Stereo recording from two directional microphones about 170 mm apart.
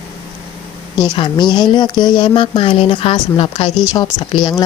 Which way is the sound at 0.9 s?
25° left (ahead or behind).